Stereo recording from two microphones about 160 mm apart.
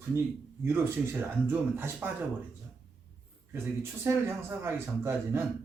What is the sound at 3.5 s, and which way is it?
Speech, 15° right (ahead or behind).